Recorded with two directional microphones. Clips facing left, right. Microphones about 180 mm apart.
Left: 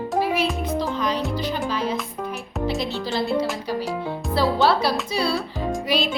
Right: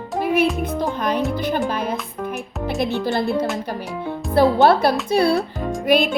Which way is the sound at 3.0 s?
55° right (ahead or behind).